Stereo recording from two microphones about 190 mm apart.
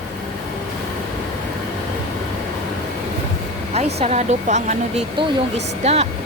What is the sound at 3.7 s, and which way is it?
Speech, 35° right (ahead or behind).